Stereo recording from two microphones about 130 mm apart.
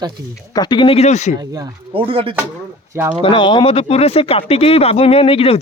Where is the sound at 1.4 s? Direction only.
30° right (ahead or behind).